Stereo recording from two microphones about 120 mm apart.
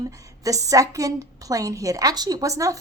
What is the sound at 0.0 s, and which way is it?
A woman's voice, 30° right (ahead or behind).